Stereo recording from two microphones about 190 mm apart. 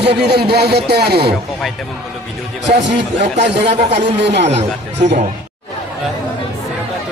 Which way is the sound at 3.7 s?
35° right (ahead or behind).